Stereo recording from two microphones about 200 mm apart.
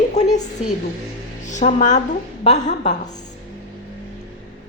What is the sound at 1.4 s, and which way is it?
A woman's voice, 35° left (ahead or behind).